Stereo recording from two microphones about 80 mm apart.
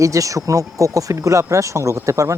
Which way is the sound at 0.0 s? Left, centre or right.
Right.